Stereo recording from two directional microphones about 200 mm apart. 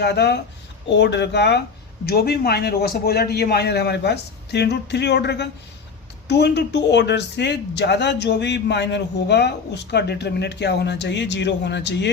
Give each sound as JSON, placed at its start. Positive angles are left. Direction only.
{"t": 0.0, "sound": "speech", "side_deg": 55}